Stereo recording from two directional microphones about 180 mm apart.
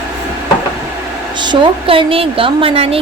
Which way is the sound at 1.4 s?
25° right (ahead or behind).